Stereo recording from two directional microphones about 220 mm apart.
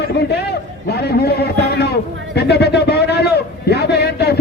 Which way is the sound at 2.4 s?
50° left (ahead or behind).